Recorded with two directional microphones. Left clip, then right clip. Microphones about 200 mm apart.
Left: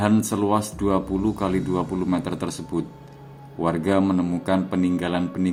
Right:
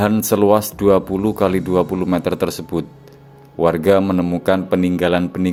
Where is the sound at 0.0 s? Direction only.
50° right (ahead or behind).